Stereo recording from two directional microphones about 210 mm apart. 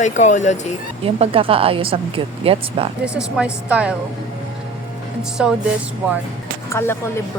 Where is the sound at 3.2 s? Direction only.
5° right (ahead or behind).